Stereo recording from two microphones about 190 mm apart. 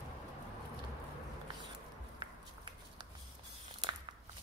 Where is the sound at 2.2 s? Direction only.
25° right (ahead or behind).